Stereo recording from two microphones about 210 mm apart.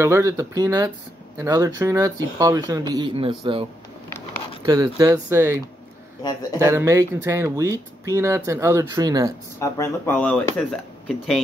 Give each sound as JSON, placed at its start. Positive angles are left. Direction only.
{"t": 0.0, "sound": "speech", "side_deg": -15}
{"t": 4.6, "sound": "speech", "side_deg": -15}
{"t": 6.6, "sound": "speech", "side_deg": -15}
{"t": 9.6, "sound": "speech", "side_deg": 10}